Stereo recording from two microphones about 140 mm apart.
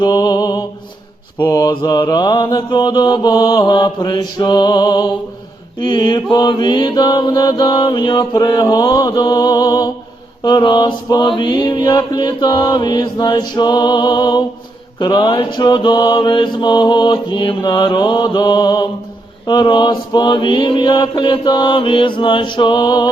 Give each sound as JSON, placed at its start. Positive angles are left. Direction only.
{"t": 0.0, "sound": "music", "side_deg": 30}
{"t": 1.4, "sound": "mantra", "side_deg": 25}